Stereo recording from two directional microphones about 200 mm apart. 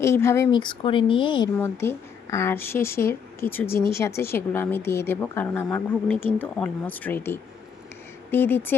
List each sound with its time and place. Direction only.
0.0 s speech: 15° left (ahead or behind)
1.5 s a woman's voice: 10° left (ahead or behind)